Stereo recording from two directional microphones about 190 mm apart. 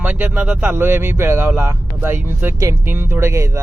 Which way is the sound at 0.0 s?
10° right (ahead or behind).